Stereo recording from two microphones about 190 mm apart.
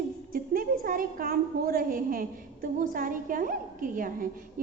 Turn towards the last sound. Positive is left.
turn(degrees=-45)  # may be behind; listen again after turning